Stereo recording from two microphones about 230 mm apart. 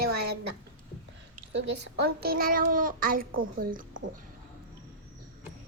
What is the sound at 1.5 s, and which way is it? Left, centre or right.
A child's voice, right.